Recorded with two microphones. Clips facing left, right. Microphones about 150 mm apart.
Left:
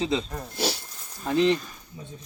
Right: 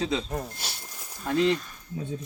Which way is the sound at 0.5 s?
90° left.